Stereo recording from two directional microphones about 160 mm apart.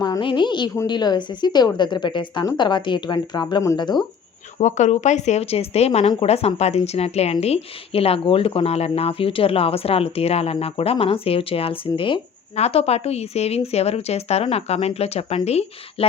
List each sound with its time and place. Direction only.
0.0 s a woman's voice: 30° left (ahead or behind)
4.5 s speech: 45° left (ahead or behind)